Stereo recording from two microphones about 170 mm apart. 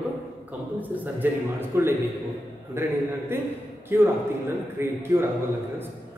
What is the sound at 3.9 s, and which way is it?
A man's voice, 10° right (ahead or behind).